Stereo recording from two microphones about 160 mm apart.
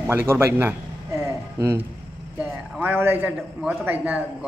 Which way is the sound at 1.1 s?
15° right (ahead or behind).